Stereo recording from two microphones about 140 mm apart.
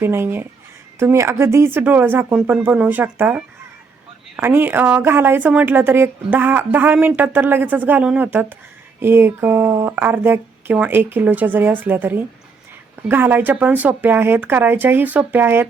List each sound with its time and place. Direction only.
0.0 s speech: 15° right (ahead or behind)